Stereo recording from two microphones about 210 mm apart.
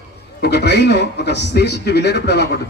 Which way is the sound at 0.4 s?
55° left (ahead or behind).